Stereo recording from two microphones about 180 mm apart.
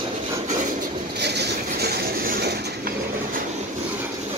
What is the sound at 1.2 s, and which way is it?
Train, 65° right (ahead or behind).